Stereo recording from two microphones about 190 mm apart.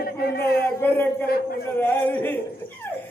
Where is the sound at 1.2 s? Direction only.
55° left (ahead or behind).